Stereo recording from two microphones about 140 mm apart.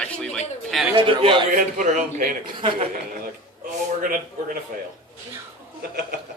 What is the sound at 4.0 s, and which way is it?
Speech, 90° right.